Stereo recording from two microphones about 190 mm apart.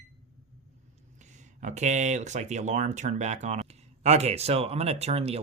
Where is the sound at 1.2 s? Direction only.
40° right (ahead or behind).